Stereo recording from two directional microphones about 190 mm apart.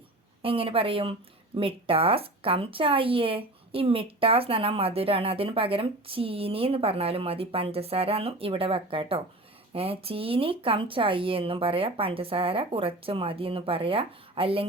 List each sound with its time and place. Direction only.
0.4 s a woman's voice: 30° right (ahead or behind)